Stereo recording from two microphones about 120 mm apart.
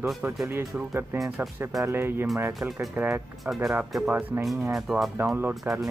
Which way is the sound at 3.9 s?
Centre (ahead or behind).